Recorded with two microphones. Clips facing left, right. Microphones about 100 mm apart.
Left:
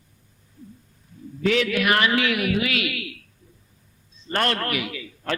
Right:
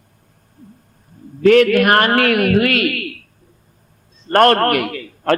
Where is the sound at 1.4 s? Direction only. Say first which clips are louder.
Right 11 dB; 55° right (ahead or behind).